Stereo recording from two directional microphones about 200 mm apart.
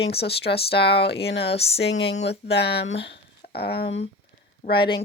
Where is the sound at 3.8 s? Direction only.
30° left (ahead or behind).